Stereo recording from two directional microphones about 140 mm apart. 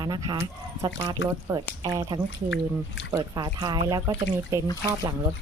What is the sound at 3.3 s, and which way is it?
Speech, 30° right (ahead or behind).